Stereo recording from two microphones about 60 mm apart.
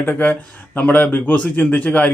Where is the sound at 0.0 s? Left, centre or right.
Left.